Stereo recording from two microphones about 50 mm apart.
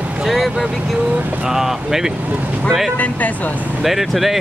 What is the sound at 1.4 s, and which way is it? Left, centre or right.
Speech, centre.